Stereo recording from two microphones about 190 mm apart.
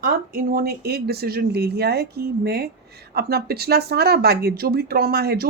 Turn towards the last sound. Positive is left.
turn(degrees=-55)  # may be behind; listen again after turning